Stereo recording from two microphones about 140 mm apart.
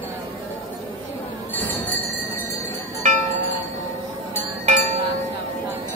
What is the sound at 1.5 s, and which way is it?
Chink, 10° left (ahead or behind).